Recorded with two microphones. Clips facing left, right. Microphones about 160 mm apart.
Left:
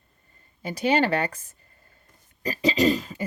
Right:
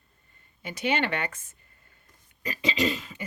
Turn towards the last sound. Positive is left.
turn(degrees=40)  # may be behind; listen again after turning